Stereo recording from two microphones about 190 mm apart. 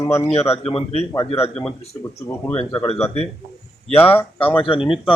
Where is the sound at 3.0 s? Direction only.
30° left (ahead or behind).